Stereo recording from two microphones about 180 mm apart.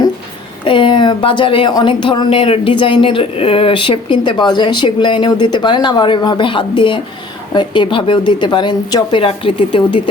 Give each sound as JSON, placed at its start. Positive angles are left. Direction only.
{"t": 0.6, "sound": "speech", "side_deg": 30}